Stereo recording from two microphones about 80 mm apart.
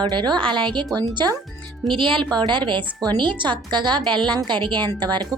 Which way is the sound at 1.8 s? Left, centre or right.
Right.